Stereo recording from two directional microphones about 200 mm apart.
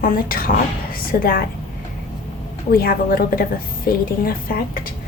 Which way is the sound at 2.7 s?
45° left (ahead or behind).